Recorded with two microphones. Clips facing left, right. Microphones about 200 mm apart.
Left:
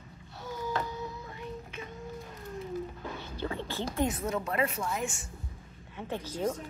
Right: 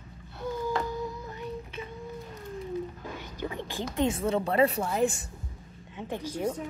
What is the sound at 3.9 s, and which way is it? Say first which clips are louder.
A woman's voice: right 5 dB; 25° right (ahead or behind).